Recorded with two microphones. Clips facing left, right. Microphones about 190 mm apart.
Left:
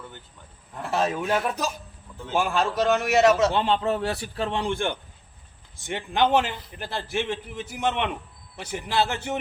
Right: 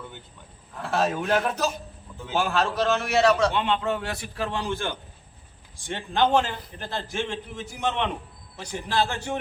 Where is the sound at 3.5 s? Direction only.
35° left (ahead or behind); by 8.1 s 15° left (ahead or behind).